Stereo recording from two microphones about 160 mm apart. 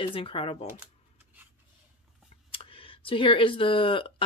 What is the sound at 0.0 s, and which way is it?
Speech, 35° left (ahead or behind).